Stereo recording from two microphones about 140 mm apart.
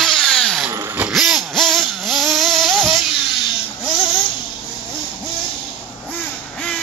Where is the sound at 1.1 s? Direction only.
5° right (ahead or behind).